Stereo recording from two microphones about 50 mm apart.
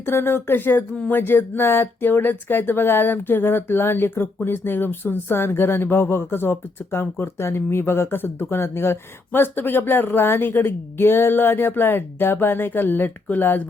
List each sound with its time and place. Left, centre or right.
0.0 s speech: left
7.3 s speech: left